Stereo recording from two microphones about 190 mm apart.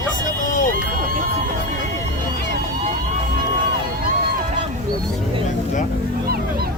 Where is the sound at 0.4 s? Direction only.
45° left (ahead or behind).